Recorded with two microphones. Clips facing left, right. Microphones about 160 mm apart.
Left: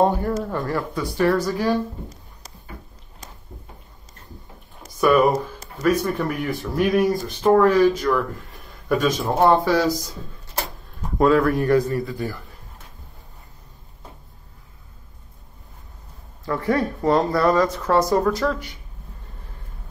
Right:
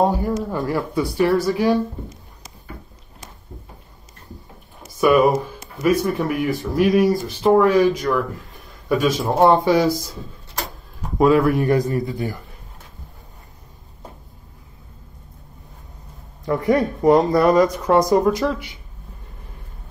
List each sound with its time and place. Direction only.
0.0 s speech: 10° right (ahead or behind)
4.8 s a sound: 10° right (ahead or behind)
5.8 s speech: 10° right (ahead or behind)
11.0 s speech: 10° right (ahead or behind)
16.4 s speech: 20° right (ahead or behind)